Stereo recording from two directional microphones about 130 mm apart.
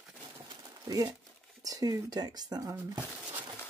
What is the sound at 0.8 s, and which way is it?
Speech, 25° right (ahead or behind).